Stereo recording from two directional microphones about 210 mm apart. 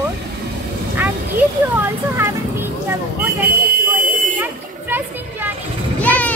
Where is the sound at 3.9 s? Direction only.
10° right (ahead or behind).